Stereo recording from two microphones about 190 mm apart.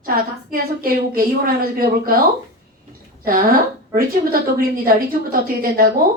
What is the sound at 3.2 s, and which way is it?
Speech, 50° right (ahead or behind).